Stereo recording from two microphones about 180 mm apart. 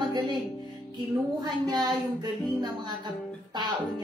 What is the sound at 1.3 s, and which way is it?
Music, 25° right (ahead or behind).